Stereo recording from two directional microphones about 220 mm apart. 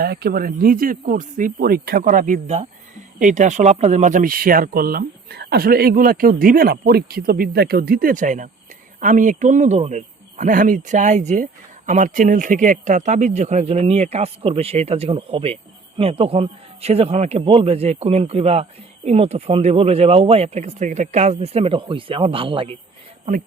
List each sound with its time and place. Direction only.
0.0 s speech: 45° right (ahead or behind); by 22.8 s 25° right (ahead or behind)